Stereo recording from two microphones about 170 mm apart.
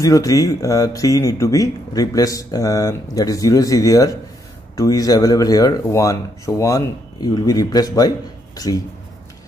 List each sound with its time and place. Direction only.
0.0 s speech: 20° left (ahead or behind)